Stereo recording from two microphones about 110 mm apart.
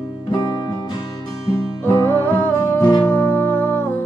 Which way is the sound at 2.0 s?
20° left (ahead or behind).